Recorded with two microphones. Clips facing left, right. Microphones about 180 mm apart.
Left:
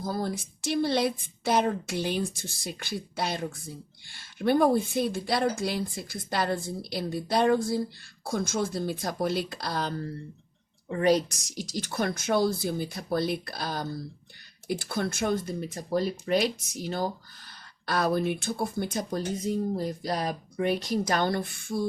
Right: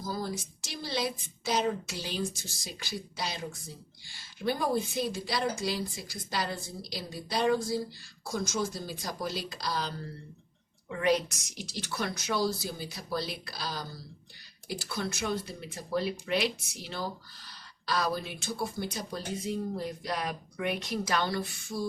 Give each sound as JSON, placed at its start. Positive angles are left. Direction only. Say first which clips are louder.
{"t": 0.0, "sound": "a woman's voice", "louder": "left 4 dB", "side_deg": 55}
{"t": 10.8, "sound": "speech", "louder": "left 4 dB", "side_deg": 35}